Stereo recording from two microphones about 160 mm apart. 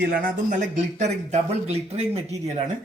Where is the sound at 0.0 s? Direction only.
75° right (ahead or behind).